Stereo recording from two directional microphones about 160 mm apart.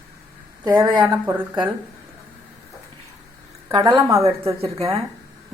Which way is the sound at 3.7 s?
25° right (ahead or behind).